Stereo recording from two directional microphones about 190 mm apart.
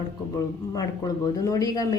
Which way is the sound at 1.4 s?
20° left (ahead or behind).